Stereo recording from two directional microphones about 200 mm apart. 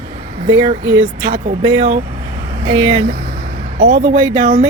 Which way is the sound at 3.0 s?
30° right (ahead or behind).